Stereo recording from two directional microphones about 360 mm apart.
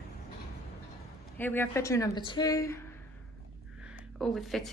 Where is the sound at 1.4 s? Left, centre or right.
Centre.